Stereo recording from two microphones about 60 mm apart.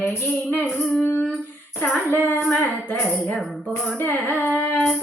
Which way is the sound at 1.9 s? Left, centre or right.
Left.